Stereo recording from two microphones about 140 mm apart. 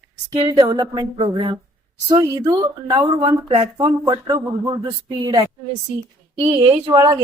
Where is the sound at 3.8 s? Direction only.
35° right (ahead or behind).